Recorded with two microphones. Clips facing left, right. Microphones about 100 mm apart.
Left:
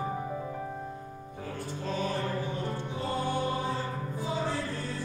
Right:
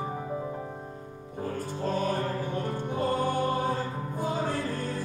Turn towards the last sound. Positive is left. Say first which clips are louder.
# right 2 dB
turn(degrees=-50)  # may be behind; listen again after turning